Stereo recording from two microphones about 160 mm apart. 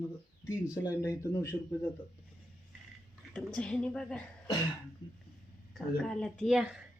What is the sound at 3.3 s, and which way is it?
Speech, 5° left (ahead or behind).